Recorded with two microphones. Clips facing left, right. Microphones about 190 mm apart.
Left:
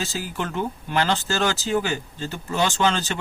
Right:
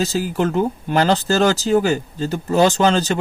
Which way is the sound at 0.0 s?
40° right (ahead or behind).